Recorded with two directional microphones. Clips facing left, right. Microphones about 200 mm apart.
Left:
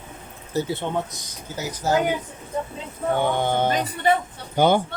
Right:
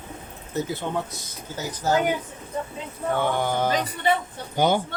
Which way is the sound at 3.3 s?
25° left (ahead or behind).